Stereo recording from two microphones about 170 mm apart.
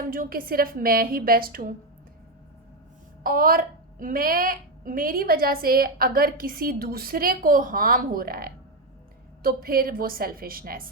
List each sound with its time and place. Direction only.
0.1 s a woman's voice: 60° right (ahead or behind)
3.2 s a woman's voice: 55° right (ahead or behind)